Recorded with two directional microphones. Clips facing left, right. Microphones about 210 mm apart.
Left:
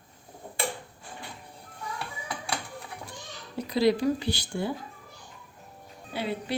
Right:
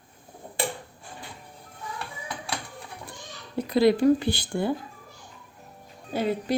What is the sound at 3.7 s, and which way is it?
Speech, 55° right (ahead or behind).